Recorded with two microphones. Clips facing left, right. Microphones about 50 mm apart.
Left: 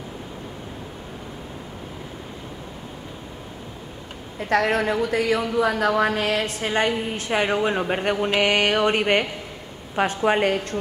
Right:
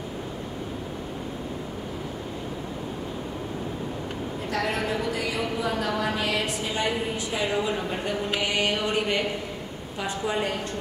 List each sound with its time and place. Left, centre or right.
4.5 s a woman's voice: left